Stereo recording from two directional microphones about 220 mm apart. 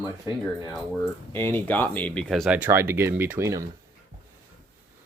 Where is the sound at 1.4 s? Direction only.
10° left (ahead or behind); by 3.7 s 15° right (ahead or behind).